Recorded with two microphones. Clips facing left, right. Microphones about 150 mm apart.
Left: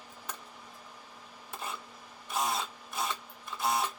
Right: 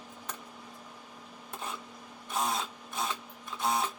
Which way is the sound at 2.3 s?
5° left (ahead or behind).